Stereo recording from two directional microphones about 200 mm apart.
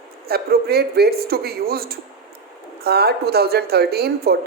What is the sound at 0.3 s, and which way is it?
A woman's voice, 50° right (ahead or behind).